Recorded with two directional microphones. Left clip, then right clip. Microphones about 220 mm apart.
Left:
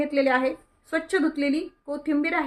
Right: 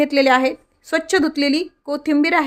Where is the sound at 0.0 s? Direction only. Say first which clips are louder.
Right 7 dB; 45° right (ahead or behind).